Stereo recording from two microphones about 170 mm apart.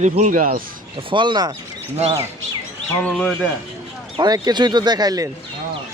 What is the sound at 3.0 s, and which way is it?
Speech, 5° left (ahead or behind).